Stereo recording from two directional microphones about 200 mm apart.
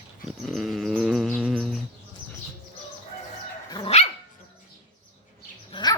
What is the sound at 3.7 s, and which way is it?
Dog, 30° left (ahead or behind).